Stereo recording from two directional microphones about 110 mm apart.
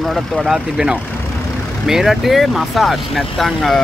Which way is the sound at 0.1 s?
5° right (ahead or behind).